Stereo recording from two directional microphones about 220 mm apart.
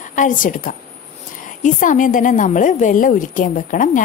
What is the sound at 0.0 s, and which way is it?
A woman's voice, 35° left (ahead or behind).